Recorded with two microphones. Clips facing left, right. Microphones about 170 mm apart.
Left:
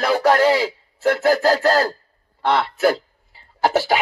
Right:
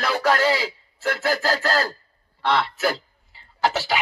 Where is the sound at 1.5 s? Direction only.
25° left (ahead or behind).